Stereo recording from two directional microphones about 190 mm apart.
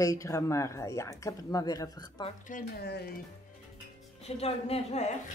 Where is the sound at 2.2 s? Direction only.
45° left (ahead or behind).